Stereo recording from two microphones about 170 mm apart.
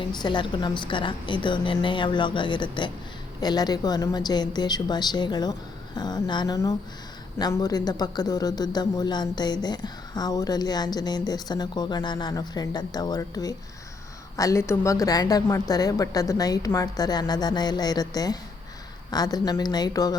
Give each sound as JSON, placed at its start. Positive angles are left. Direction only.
{"t": 0.1, "sound": "a man's voice", "side_deg": 25}